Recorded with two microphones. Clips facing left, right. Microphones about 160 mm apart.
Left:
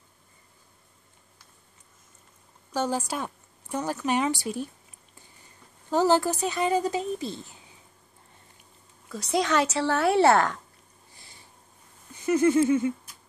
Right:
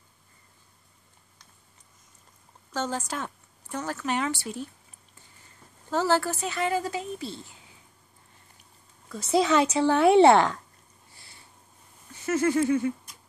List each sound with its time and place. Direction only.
2.7 s a woman's voice: 10° left (ahead or behind)
5.9 s a woman's voice: 15° left (ahead or behind)
9.1 s speech: 5° right (ahead or behind)
11.1 s a sound: 15° left (ahead or behind)